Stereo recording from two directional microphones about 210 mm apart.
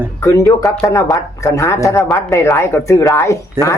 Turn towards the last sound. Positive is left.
turn(degrees=15)  # may be behind; listen again after turning